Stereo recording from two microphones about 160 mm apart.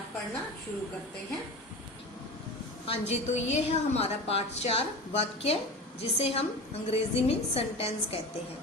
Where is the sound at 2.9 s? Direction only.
45° left (ahead or behind).